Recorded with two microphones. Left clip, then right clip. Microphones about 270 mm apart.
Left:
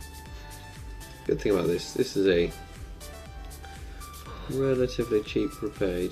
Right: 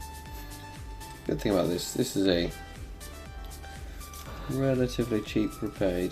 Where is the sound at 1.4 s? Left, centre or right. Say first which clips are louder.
Even; right.